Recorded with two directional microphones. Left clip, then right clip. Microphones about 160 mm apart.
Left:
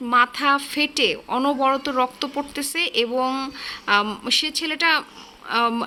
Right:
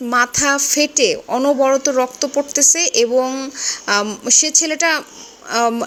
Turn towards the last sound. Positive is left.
turn(degrees=-15)  # may be behind; listen again after turning